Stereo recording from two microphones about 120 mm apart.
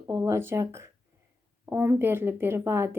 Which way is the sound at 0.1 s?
20° right (ahead or behind).